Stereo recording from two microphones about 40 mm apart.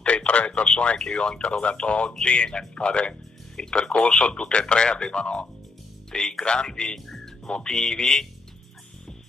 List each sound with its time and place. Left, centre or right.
0.0 s radio: left
0.5 s speech: left